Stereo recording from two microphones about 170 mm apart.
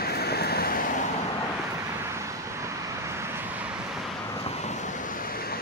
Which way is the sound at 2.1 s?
15° right (ahead or behind).